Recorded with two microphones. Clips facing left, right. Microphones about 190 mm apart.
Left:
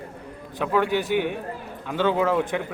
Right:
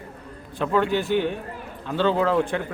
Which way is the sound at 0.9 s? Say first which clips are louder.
Right 1 dB; 15° left (ahead or behind).